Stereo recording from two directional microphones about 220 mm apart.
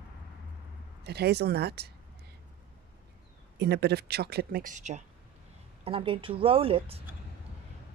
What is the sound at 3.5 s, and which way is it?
Speech, 50° right (ahead or behind).